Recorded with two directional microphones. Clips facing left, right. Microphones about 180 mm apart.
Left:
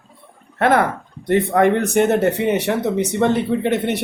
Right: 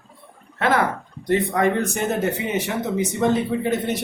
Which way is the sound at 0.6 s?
55° left (ahead or behind).